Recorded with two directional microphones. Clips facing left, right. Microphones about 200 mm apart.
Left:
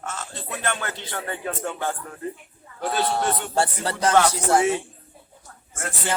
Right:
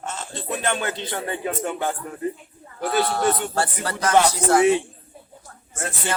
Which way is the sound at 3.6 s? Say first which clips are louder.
Left 1 dB; 30° left (ahead or behind).